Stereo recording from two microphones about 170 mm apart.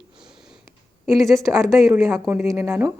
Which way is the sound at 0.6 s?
15° right (ahead or behind).